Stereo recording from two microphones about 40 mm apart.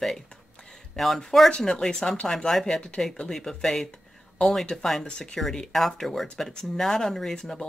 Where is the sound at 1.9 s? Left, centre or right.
Centre.